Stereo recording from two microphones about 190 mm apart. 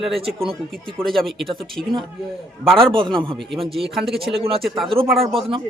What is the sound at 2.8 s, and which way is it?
Speech, 25° right (ahead or behind).